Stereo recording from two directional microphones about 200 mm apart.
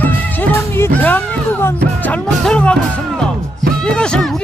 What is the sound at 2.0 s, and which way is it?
Speech, 5° left (ahead or behind).